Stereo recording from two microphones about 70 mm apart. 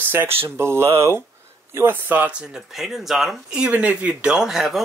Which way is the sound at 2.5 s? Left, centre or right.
Centre.